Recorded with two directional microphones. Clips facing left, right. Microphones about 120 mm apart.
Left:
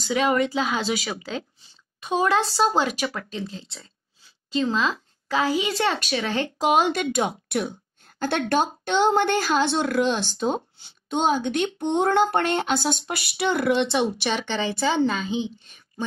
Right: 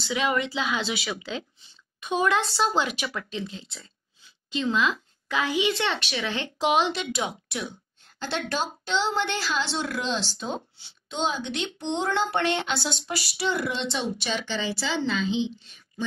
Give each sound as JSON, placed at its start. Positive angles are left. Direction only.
{"t": 0.0, "sound": "a woman's voice", "side_deg": 40}